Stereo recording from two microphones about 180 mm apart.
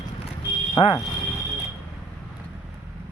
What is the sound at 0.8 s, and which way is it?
Speech, 35° left (ahead or behind).